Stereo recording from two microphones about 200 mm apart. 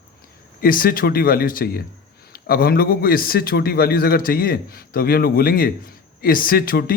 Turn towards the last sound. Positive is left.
turn(degrees=45)  # may be behind; listen again after turning